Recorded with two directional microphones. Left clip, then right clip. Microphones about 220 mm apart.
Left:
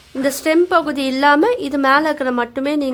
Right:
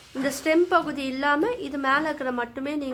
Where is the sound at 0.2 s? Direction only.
30° left (ahead or behind).